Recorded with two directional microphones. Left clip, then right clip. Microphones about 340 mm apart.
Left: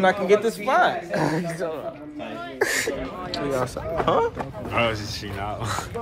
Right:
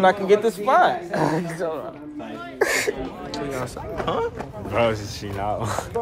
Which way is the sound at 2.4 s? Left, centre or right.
Centre.